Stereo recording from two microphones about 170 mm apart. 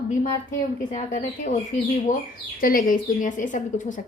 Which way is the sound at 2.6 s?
55° left (ahead or behind).